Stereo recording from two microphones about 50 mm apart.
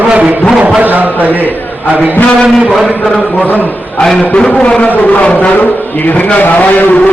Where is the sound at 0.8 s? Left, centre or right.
Right.